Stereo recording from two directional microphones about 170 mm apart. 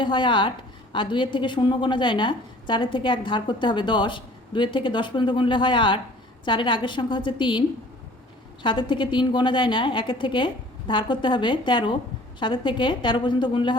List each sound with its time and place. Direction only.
0.0 s a woman's voice: 30° left (ahead or behind)
8.6 s a woman's voice: 30° left (ahead or behind)